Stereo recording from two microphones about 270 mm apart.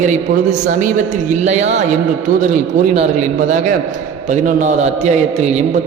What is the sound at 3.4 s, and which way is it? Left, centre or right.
A man's voice, right.